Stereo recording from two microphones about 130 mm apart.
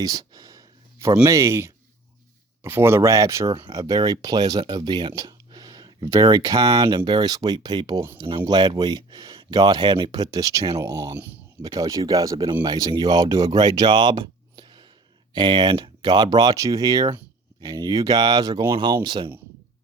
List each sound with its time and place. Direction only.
0.0 s speech: 30° right (ahead or behind)